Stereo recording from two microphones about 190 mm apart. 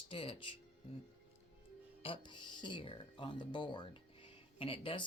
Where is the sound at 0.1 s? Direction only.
30° left (ahead or behind).